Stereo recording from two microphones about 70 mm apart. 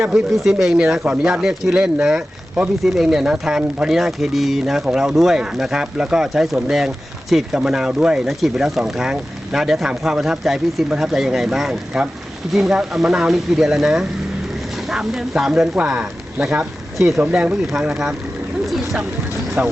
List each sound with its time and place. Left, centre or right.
0.1 s speech: centre
17.3 s speech: centre
18.6 s a sound: centre
19.6 s speech: right